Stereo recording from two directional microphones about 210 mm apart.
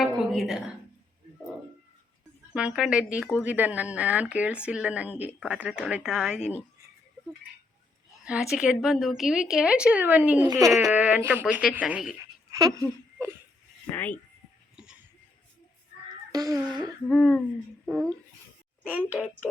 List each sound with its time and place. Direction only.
0.0 s a sound: centre (ahead or behind)
2.5 s a woman's voice: 5° right (ahead or behind)
8.2 s a woman's voice: 5° right (ahead or behind)
12.5 s a sound: 15° right (ahead or behind)
13.9 s speech: 10° left (ahead or behind)
16.3 s speech: 15° right (ahead or behind)
17.1 s a woman's voice: 5° left (ahead or behind)
17.9 s a woman's voice: 15° right (ahead or behind)